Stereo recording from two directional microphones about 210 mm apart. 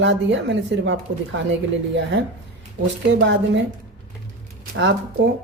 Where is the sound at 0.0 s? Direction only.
60° right (ahead or behind).